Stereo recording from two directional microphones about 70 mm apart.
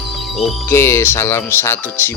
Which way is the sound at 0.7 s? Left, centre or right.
Left.